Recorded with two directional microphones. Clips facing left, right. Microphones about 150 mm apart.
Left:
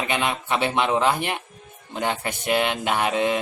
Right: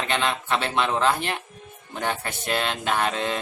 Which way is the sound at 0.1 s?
15° left (ahead or behind).